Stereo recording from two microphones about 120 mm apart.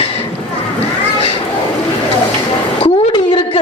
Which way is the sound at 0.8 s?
55° left (ahead or behind).